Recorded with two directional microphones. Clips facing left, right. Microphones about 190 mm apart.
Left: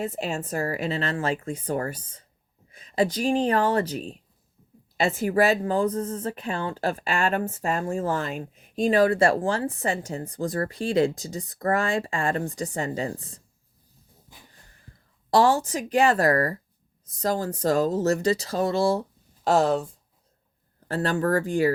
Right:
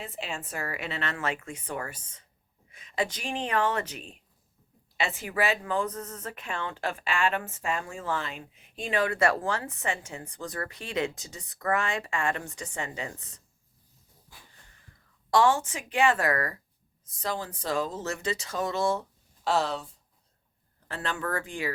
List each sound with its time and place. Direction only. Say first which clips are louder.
0.0 s speech: left 8 dB; 40° left (ahead or behind)
15.3 s speech: left 3 dB; 35° left (ahead or behind)
19.5 s speech: left 7 dB; 45° left (ahead or behind)